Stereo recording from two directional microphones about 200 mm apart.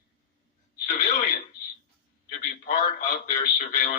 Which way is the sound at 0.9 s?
45° left (ahead or behind).